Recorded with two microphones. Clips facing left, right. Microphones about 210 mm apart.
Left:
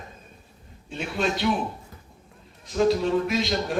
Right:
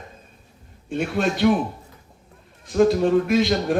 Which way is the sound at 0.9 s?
55° right (ahead or behind).